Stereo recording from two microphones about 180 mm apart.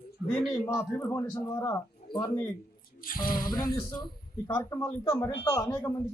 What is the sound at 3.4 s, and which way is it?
A man's voice, 25° left (ahead or behind).